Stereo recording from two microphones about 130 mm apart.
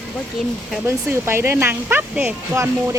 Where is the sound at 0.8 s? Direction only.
20° right (ahead or behind).